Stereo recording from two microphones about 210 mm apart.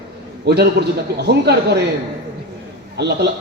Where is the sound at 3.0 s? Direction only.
50° right (ahead or behind).